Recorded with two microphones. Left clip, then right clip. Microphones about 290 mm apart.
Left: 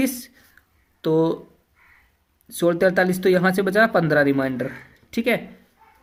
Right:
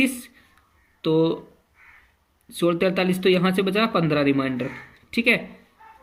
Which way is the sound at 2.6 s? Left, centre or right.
Left.